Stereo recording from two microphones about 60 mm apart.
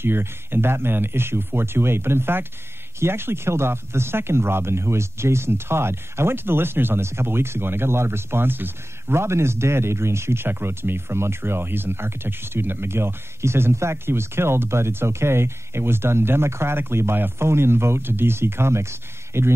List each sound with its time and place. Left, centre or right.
0.0 s speech: right